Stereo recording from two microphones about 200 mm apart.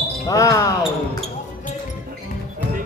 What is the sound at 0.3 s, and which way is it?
Speech, 15° left (ahead or behind).